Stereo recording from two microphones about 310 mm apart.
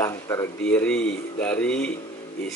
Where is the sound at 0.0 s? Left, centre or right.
Centre.